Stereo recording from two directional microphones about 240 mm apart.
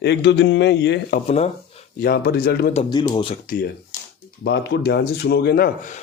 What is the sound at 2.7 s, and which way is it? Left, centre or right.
Speech, left.